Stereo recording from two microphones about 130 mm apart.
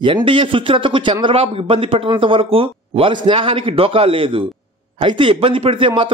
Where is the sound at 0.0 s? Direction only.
40° right (ahead or behind).